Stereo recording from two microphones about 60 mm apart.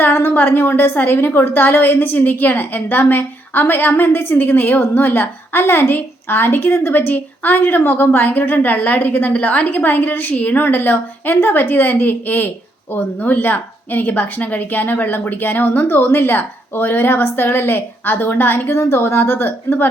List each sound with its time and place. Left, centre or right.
0.0 s a woman's voice: left
18.7 s a woman's voice: left